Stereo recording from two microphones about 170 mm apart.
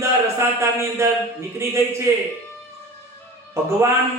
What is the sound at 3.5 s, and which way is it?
Speech, 15° right (ahead or behind).